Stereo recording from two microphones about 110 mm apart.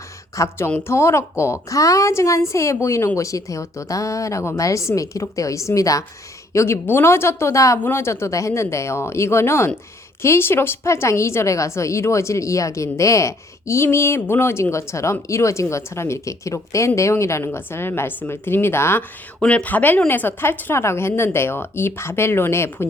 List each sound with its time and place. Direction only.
0.3 s speech: 25° left (ahead or behind)
19.4 s speech: 10° left (ahead or behind)